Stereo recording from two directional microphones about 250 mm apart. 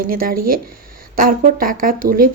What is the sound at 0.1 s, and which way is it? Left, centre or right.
Speech, right.